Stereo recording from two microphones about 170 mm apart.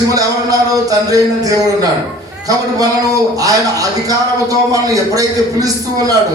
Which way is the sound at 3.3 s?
20° right (ahead or behind).